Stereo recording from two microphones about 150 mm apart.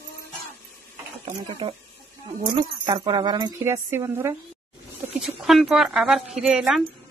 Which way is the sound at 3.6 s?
15° right (ahead or behind).